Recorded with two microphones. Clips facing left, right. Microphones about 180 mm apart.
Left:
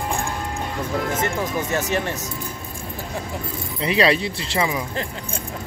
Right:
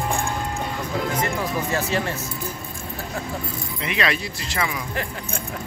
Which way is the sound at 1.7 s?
20° left (ahead or behind).